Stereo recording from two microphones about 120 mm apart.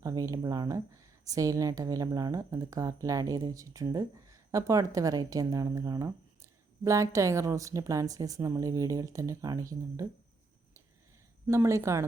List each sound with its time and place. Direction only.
0.0 s speech: 30° right (ahead or behind)
11.4 s speech: 20° right (ahead or behind)